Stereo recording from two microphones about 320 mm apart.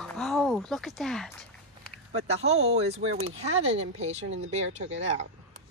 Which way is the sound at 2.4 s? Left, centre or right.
Centre.